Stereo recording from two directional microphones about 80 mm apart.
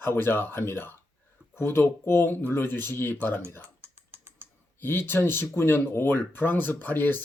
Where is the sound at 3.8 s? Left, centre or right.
Right.